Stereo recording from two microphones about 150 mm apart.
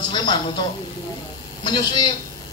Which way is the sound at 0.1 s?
30° left (ahead or behind).